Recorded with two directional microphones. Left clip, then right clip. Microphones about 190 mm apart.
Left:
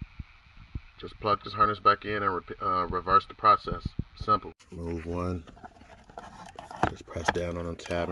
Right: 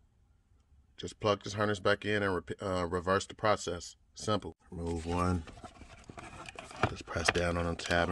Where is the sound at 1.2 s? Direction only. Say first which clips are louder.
Left 6 dB; 15° right (ahead or behind).